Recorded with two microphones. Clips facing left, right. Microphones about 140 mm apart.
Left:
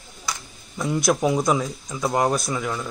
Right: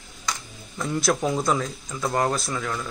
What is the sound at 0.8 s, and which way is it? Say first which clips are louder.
Speech: left 3 dB; 15° left (ahead or behind).